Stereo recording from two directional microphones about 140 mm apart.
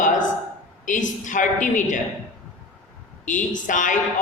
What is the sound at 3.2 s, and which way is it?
Speech, 65° left (ahead or behind).